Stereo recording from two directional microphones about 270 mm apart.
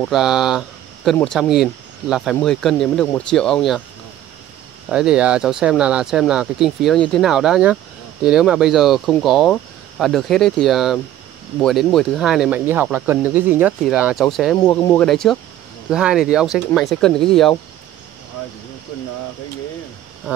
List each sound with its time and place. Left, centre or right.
0.0 s speech: centre
4.8 s speech: centre